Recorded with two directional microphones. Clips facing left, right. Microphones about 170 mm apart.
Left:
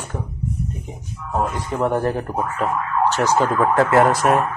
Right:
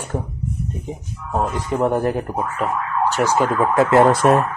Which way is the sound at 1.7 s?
15° right (ahead or behind).